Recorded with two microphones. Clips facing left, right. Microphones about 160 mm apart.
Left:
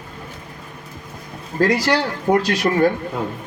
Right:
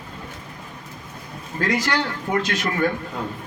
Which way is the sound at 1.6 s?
35° left (ahead or behind).